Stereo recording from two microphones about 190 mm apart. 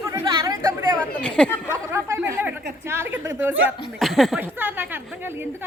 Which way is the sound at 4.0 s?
Centre (ahead or behind).